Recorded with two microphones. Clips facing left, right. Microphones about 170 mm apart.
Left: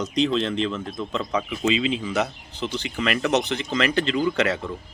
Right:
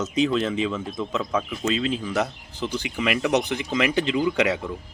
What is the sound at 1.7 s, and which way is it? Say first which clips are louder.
Speech: left 1 dB; 90° left.